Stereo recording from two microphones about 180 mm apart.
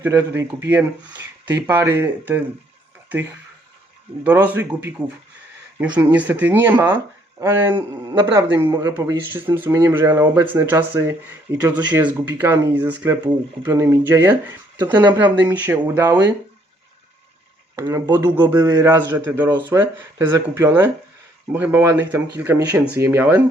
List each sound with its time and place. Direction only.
0.0 s speech: 10° right (ahead or behind)
16.0 s speech: 20° right (ahead or behind)
17.7 s speech: 15° right (ahead or behind)